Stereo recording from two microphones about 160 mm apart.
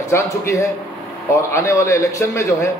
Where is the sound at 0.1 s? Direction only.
20° left (ahead or behind).